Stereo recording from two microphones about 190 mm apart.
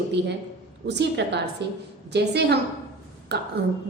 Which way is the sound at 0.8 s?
65° right (ahead or behind).